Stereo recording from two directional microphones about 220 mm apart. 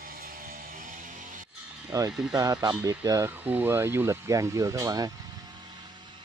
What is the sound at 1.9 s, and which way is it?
Speech, 15° right (ahead or behind).